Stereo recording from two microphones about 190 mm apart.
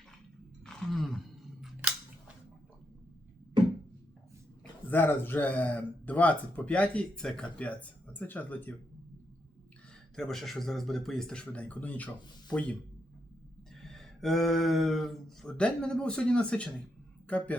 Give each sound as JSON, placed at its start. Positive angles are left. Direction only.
{"t": 0.6, "sound": "throat clearing", "side_deg": 0}
{"t": 4.9, "sound": "speech", "side_deg": 10}
{"t": 10.2, "sound": "speech", "side_deg": 0}
{"t": 13.8, "sound": "speech", "side_deg": 0}